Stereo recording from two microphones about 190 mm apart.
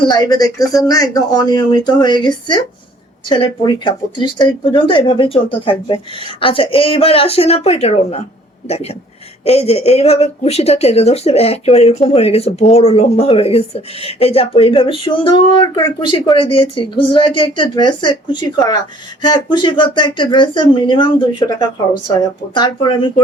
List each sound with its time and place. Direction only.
0.0 s speech: 20° left (ahead or behind)